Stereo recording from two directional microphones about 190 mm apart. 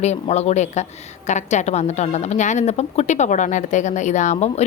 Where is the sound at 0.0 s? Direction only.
35° left (ahead or behind).